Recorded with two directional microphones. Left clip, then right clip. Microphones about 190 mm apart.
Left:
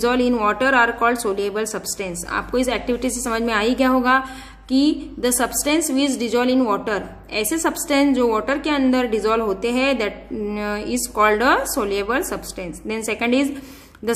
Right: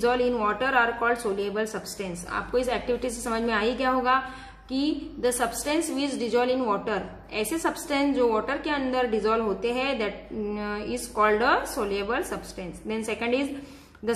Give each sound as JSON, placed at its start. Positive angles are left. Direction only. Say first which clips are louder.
{"t": 0.0, "sound": "a woman's voice", "louder": "left 5 dB", "side_deg": 45}